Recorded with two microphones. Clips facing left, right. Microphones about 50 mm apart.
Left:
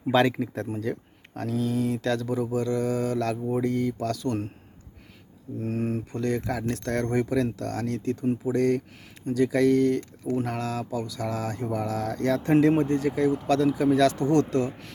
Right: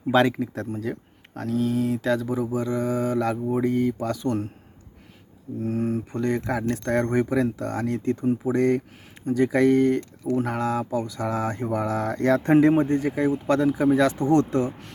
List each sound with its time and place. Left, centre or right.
0.1 s speech: centre
5.5 s speech: centre
6.1 s speech: right
12.7 s speech: right